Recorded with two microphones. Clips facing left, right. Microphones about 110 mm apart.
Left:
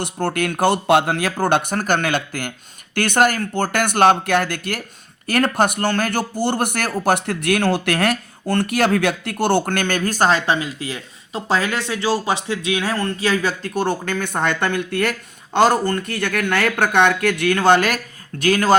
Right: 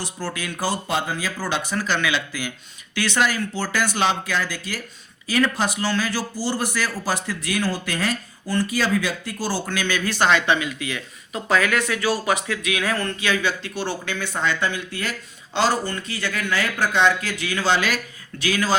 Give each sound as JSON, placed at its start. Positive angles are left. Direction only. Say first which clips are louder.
{"t": 0.0, "sound": "speech", "louder": "left 8 dB", "side_deg": 60}